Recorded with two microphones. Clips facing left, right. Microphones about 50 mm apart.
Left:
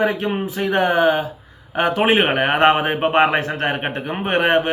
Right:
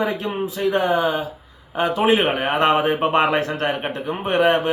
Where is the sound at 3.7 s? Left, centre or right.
Left.